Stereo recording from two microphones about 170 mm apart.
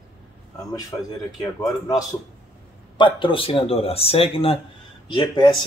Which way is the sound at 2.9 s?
30° left (ahead or behind).